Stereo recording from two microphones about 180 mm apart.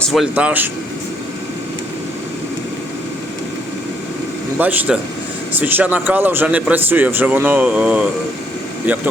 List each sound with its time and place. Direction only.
0.0 s speech: centre (ahead or behind)
4.5 s speech: 10° right (ahead or behind)